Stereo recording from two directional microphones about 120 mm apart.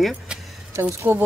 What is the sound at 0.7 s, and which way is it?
Speech, 20° right (ahead or behind).